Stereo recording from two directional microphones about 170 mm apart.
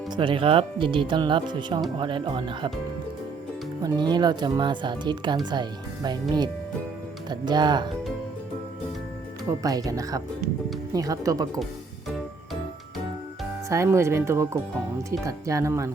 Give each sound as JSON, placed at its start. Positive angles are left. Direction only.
{"t": 0.2, "sound": "speech", "side_deg": -30}
{"t": 3.8, "sound": "speech", "side_deg": -25}
{"t": 9.5, "sound": "speech", "side_deg": -20}
{"t": 13.7, "sound": "speech", "side_deg": -15}